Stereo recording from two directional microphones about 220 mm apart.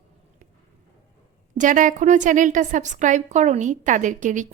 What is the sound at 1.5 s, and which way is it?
A woman's voice, 35° right (ahead or behind).